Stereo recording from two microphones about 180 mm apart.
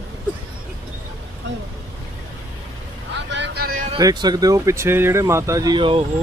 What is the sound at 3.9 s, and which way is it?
Speech, 25° right (ahead or behind).